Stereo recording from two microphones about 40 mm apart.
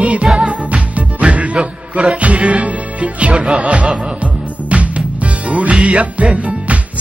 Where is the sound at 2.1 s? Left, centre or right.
Right.